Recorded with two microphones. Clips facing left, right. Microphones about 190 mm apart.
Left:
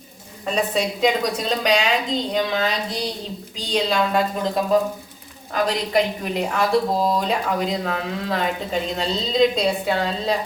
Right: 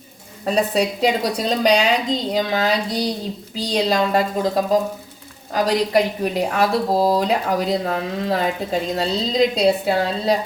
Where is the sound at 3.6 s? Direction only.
35° right (ahead or behind).